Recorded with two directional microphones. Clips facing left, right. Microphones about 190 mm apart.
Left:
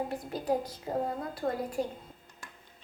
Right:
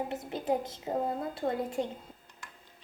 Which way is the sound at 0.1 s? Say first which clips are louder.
Even; 20° right (ahead or behind).